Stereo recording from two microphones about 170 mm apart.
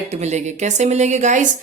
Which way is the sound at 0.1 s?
40° right (ahead or behind).